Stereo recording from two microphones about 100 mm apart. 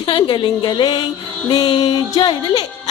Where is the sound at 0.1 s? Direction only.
50° left (ahead or behind).